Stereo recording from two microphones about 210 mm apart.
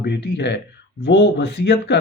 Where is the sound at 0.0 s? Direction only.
55° left (ahead or behind).